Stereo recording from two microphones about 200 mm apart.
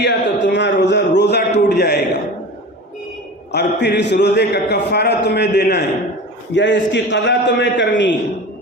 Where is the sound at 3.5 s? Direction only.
60° left (ahead or behind).